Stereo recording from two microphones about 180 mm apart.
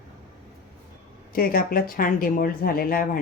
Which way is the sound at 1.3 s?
55° left (ahead or behind).